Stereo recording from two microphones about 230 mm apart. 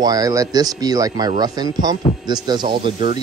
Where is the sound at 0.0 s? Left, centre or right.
Centre.